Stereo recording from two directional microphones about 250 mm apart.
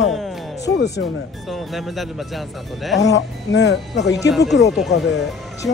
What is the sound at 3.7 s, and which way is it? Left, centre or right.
Speech, centre.